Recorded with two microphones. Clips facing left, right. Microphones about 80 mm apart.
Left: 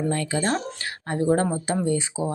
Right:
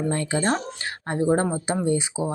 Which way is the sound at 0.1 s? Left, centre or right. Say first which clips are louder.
Right 1 dB; right.